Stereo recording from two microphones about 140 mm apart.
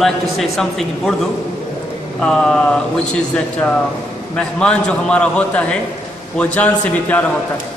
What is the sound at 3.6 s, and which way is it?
A man's voice, 10° left (ahead or behind).